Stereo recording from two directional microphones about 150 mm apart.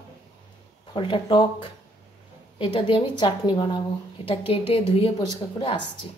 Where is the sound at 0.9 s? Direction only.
30° left (ahead or behind).